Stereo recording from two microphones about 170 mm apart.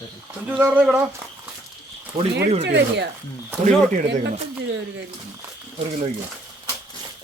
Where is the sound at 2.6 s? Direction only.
90° right.